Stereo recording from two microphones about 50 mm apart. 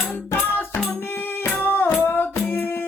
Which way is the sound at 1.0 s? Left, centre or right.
Left.